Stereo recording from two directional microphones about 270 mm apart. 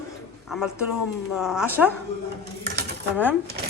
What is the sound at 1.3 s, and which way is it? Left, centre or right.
Speech, centre.